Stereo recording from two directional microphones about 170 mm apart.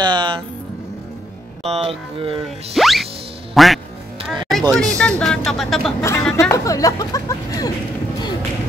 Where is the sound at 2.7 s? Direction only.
Centre (ahead or behind).